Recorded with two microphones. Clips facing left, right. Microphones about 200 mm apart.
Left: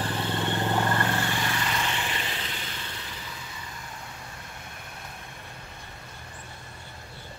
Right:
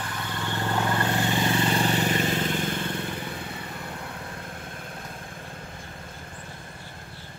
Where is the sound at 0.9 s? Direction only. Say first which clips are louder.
Right 3 dB; 20° right (ahead or behind); by 4.5 s 55° right (ahead or behind).